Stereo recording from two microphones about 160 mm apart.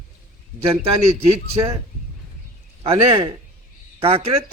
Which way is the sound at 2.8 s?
35° right (ahead or behind).